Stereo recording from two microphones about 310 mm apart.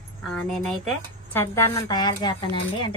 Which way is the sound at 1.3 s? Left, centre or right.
Centre.